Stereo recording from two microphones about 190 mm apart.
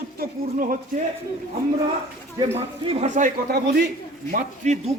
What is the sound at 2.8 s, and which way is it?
A man's voice, 30° right (ahead or behind).